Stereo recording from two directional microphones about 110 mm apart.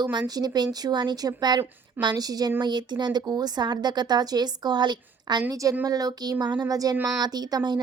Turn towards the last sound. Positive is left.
turn(degrees=-40)  # may be behind; listen again after turning